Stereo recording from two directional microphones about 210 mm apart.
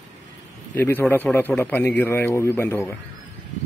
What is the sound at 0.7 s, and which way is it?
A man's voice, 10° left (ahead or behind).